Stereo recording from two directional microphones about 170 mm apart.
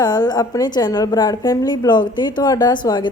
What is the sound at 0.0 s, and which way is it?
A woman's voice, 25° left (ahead or behind).